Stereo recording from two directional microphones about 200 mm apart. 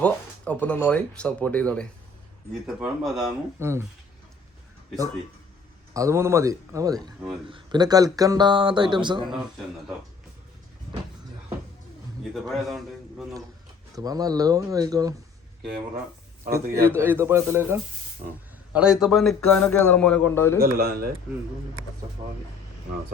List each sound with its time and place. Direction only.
0.0 s a man's voice: 5° left (ahead or behind)
3.6 s speech: 15° right (ahead or behind)
5.9 s speech: 15° right (ahead or behind)
9.2 s a man's voice: centre (ahead or behind)
12.3 s a man's voice: centre (ahead or behind)
13.9 s speech: 20° right (ahead or behind)
16.8 s a man's voice: 10° right (ahead or behind); by 20.6 s 10° left (ahead or behind)
20.6 s speech: 50° right (ahead or behind)